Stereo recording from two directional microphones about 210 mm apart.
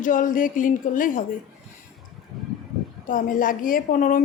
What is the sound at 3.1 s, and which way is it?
A woman's voice, 40° left (ahead or behind).